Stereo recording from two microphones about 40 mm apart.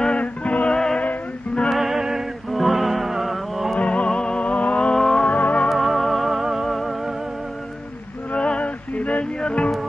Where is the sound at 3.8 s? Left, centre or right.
Left.